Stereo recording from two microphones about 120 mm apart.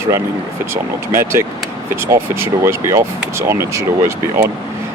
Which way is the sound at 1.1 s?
20° right (ahead or behind).